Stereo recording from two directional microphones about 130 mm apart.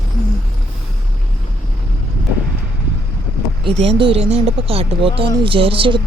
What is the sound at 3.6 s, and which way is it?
Speech, 45° right (ahead or behind).